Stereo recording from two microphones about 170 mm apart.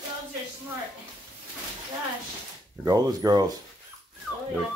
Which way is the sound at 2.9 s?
20° right (ahead or behind).